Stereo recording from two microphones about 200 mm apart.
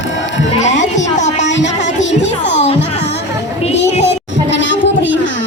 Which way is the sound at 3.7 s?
60° left (ahead or behind).